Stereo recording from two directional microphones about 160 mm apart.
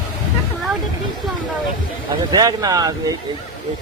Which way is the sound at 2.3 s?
25° right (ahead or behind).